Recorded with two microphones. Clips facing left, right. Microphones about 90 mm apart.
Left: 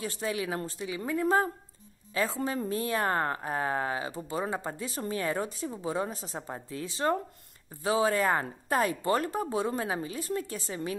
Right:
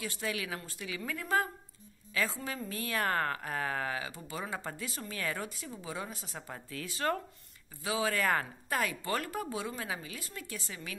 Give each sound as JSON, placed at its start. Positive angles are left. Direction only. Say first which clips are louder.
{"t": 0.0, "sound": "a woman's voice", "louder": "left 5 dB", "side_deg": 30}
{"t": 7.7, "sound": "speech", "louder": "left 6 dB", "side_deg": 35}